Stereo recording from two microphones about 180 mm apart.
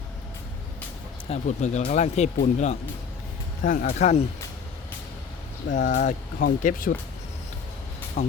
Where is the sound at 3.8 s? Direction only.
35° left (ahead or behind).